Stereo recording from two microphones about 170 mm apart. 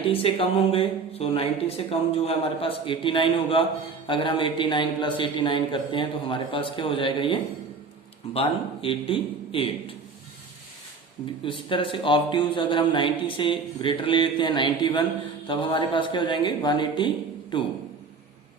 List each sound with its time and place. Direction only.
0.0 s speech: 30° left (ahead or behind)
11.4 s a man's voice: 30° left (ahead or behind)